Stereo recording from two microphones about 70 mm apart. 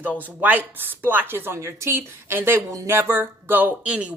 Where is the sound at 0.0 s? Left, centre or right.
Right.